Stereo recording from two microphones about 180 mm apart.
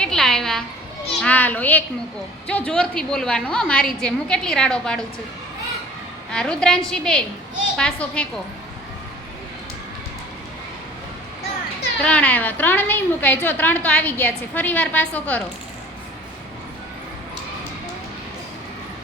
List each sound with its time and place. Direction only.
0.0 s a sound: 5° left (ahead or behind)
1.2 s a woman's voice: 10° left (ahead or behind)
6.3 s a woman's voice: 5° left (ahead or behind)
12.0 s a woman's voice: 5° left (ahead or behind)